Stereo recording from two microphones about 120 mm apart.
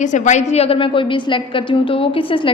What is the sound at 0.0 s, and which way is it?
A woman's voice, 85° left.